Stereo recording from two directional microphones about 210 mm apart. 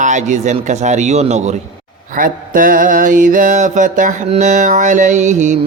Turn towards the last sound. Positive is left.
turn(degrees=-35)  # may be behind; listen again after turning